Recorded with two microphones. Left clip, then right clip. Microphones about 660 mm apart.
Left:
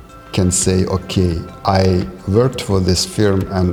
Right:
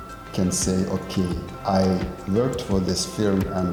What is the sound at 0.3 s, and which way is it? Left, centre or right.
Speech, left.